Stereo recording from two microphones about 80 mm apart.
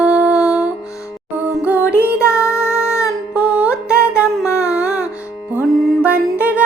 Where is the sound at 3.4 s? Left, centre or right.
Centre.